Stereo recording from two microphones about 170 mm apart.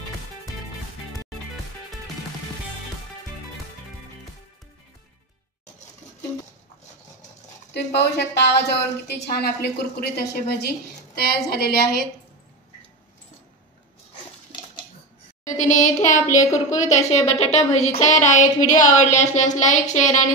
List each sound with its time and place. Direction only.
7.7 s a woman's voice: 80° left
15.4 s a woman's voice: 45° left (ahead or behind)
16.4 s speech: 20° left (ahead or behind)
16.9 s a woman's voice: 40° left (ahead or behind)